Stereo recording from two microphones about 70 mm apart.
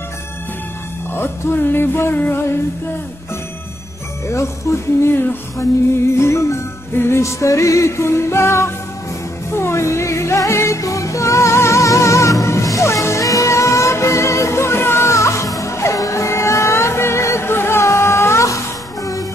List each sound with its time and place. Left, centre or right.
1.1 s music: left
4.3 s music: left
10.8 s music: left